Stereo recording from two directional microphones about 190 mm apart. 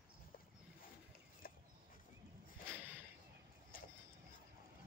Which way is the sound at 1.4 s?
50° left (ahead or behind).